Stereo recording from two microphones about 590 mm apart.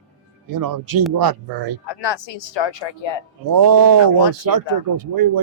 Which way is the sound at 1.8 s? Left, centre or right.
Left.